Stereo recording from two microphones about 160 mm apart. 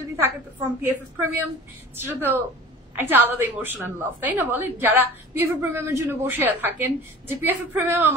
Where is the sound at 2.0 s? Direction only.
15° right (ahead or behind).